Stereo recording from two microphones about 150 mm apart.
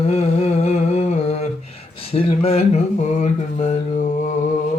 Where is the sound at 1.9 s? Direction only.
40° left (ahead or behind); by 4.3 s 55° left (ahead or behind).